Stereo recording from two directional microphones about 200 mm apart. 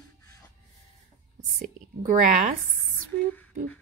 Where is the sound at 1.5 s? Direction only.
40° right (ahead or behind).